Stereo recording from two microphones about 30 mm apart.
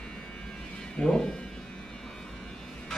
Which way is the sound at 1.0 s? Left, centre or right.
Left.